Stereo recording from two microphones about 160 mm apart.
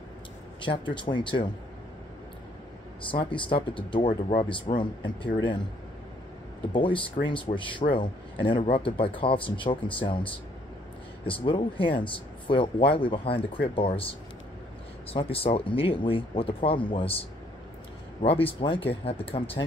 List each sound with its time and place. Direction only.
0.6 s speech: 30° left (ahead or behind)
3.0 s speech: 30° left (ahead or behind)
6.7 s speech: 30° left (ahead or behind)
11.4 s speech: 30° left (ahead or behind)
18.2 s speech: 35° left (ahead or behind)